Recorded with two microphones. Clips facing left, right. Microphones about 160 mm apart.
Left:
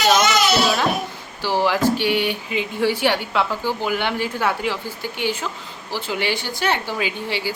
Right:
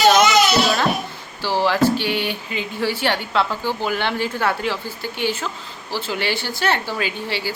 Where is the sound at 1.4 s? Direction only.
15° left (ahead or behind).